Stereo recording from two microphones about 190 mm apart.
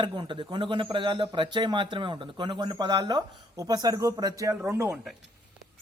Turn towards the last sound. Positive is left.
turn(degrees=0)  # may be behind; listen again after turning